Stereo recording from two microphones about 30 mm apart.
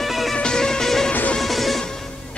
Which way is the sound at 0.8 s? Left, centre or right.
Centre.